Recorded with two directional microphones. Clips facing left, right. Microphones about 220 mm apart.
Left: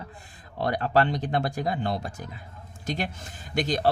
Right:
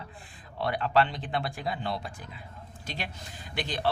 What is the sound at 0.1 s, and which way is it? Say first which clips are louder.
Speech: left 2 dB; 40° left (ahead or behind).